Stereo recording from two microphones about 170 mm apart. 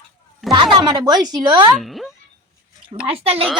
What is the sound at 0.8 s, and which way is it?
Speech, 25° right (ahead or behind).